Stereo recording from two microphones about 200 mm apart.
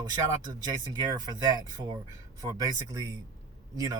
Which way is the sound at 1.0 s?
20° right (ahead or behind).